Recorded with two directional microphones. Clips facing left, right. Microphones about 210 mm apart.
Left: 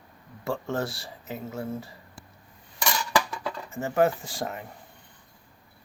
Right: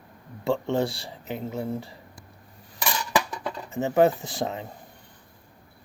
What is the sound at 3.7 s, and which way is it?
Speech, 20° right (ahead or behind).